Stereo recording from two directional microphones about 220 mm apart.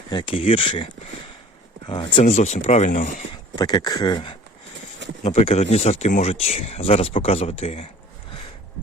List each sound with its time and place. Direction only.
0.1 s speech: 20° left (ahead or behind)
1.9 s speech: 25° left (ahead or behind)
3.5 s speech: 20° left (ahead or behind)